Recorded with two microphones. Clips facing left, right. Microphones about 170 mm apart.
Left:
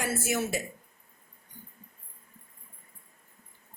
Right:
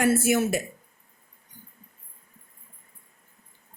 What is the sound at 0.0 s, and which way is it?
Speech, 60° right (ahead or behind).